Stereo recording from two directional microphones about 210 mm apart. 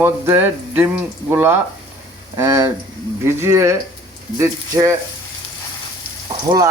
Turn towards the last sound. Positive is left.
turn(degrees=-20)  # may be behind; listen again after turning